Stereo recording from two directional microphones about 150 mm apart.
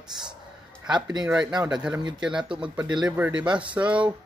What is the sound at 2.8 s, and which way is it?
Speech, 30° right (ahead or behind).